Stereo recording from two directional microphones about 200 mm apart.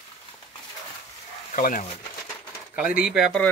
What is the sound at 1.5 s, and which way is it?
Speech, 40° left (ahead or behind).